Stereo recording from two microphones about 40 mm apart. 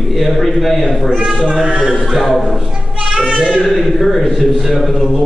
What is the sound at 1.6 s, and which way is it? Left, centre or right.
Speech, centre.